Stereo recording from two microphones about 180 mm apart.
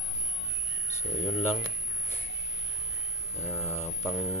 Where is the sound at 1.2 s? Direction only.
10° left (ahead or behind).